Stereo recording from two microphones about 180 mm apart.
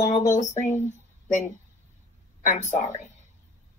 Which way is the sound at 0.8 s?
40° left (ahead or behind).